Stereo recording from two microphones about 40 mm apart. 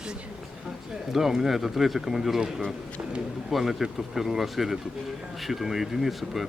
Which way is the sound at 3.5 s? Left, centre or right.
Centre.